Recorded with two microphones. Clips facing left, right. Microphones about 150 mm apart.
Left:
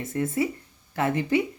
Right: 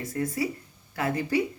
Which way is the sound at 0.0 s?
25° left (ahead or behind).